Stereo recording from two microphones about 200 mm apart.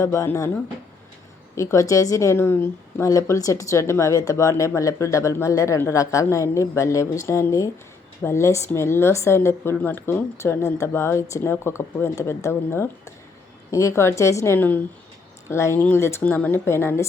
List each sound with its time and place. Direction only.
0.0 s a woman's voice: 15° left (ahead or behind)